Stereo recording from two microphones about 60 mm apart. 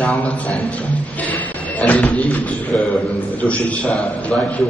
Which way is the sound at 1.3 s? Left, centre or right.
Left.